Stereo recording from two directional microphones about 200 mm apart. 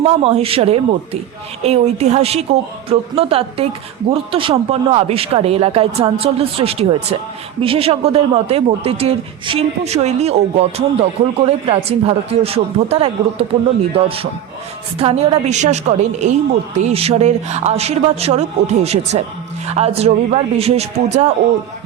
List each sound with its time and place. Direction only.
0.0 s a woman's voice: 30° right (ahead or behind)